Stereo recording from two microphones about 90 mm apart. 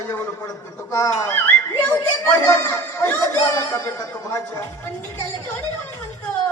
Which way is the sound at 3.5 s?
45° left (ahead or behind).